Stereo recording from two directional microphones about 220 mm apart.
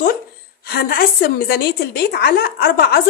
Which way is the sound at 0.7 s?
40° left (ahead or behind).